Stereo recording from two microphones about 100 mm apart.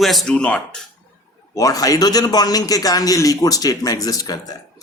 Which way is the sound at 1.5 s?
35° left (ahead or behind).